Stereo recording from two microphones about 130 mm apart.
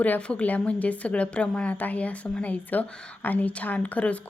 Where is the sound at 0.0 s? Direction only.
10° left (ahead or behind).